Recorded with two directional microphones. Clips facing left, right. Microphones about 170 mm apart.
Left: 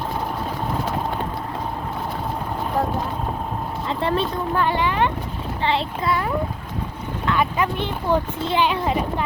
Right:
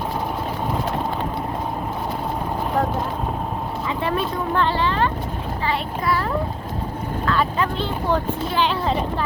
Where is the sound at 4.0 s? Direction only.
30° left (ahead or behind).